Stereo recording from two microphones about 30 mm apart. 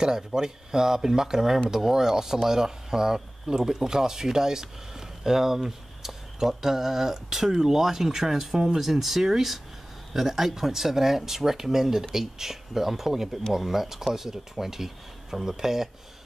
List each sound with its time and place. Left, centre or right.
0.0 s speech: centre